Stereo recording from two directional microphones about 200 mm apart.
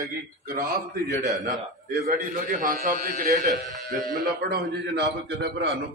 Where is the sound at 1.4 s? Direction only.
55° right (ahead or behind).